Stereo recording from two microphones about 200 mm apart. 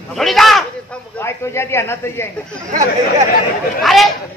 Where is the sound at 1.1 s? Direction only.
15° left (ahead or behind).